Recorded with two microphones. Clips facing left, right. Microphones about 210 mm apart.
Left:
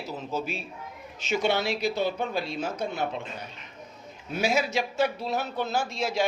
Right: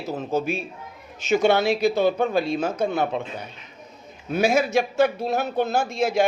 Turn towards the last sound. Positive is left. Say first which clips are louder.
# right 6 dB
turn(degrees=-50)  # may be behind; listen again after turning